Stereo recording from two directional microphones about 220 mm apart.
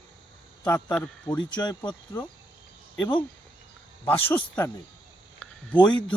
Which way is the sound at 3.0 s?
25° left (ahead or behind).